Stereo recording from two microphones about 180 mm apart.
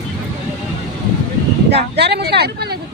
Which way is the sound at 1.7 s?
65° right (ahead or behind).